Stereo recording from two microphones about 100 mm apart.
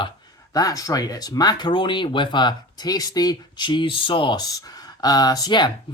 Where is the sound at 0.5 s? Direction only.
35° left (ahead or behind).